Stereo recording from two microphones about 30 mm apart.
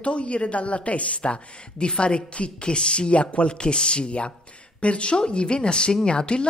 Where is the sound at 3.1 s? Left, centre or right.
Left.